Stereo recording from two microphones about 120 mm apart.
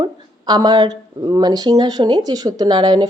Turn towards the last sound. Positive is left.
turn(degrees=-35)  # may be behind; listen again after turning